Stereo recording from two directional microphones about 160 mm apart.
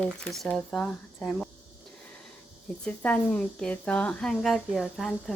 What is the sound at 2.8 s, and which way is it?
A woman's voice, 5° left (ahead or behind).